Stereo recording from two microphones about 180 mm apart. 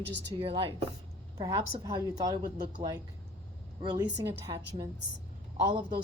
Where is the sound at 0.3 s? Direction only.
30° right (ahead or behind).